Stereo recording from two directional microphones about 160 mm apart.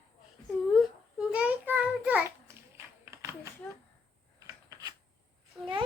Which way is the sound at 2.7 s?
15° right (ahead or behind).